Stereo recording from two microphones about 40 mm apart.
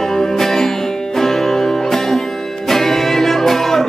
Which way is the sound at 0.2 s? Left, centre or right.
Centre.